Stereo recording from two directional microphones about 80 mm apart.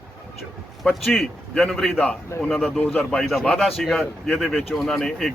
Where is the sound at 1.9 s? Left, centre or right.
Centre.